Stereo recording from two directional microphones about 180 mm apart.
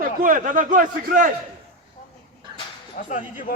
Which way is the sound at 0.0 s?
50° right (ahead or behind).